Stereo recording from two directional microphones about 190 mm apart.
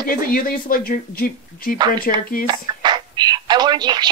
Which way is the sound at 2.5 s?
25° right (ahead or behind).